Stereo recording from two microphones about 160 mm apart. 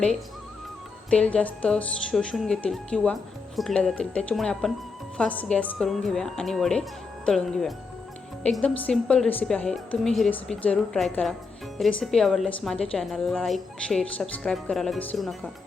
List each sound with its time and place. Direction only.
1.1 s speech: 5° left (ahead or behind)